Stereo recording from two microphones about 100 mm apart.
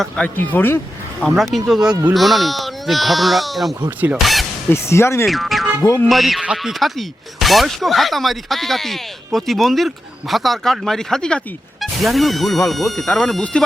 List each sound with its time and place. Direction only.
0.3 s speech: 20° left (ahead or behind)
1.2 s speech: centre (ahead or behind)
3.8 s speech: 15° right (ahead or behind)
4.2 s speech: centre (ahead or behind)
4.7 s speech: 25° left (ahead or behind)
5.2 s speech: centre (ahead or behind)